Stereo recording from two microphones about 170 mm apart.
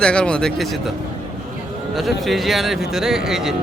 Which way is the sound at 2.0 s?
Centre (ahead or behind).